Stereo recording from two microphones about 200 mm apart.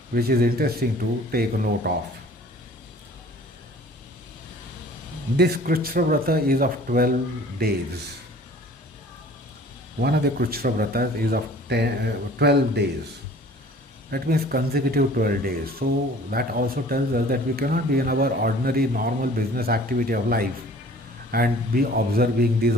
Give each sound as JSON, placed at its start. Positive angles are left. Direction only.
{"t": 0.1, "sound": "speech", "side_deg": -50}
{"t": 5.4, "sound": "speech", "side_deg": -50}
{"t": 10.0, "sound": "speech", "side_deg": -50}
{"t": 14.1, "sound": "speech", "side_deg": -50}